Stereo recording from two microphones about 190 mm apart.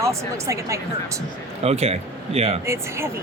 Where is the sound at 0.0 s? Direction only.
15° right (ahead or behind).